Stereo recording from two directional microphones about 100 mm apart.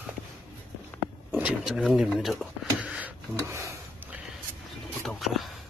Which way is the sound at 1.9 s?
Centre (ahead or behind).